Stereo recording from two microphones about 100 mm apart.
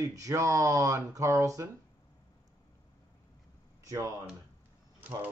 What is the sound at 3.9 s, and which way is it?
Speech, 35° right (ahead or behind).